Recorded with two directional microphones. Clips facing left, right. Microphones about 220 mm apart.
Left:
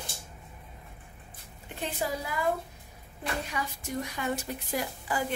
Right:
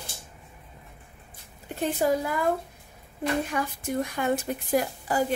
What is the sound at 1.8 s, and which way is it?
Speech, 45° right (ahead or behind).